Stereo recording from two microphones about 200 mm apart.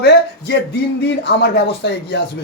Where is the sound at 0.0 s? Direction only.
55° left (ahead or behind).